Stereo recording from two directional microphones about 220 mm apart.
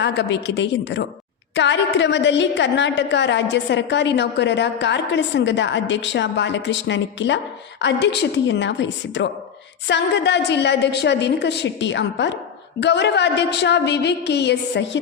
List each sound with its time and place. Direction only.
0.0 s a woman's voice: 50° left (ahead or behind)